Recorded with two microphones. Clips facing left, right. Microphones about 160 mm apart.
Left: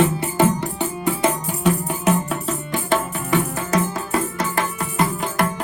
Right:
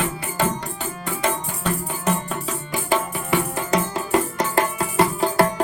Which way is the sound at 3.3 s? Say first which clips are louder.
Left 1 dB; 15° right (ahead or behind).